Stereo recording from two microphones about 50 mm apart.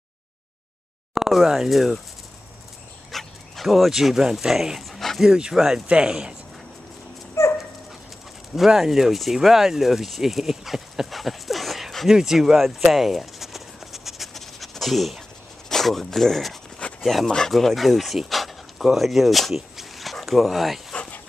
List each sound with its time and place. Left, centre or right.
1.1 s speech: centre
3.1 s speech: centre
5.2 s speech: centre
7.4 s dog: left
8.5 s speech: centre
12.5 s a sound: centre
15.7 s speech: centre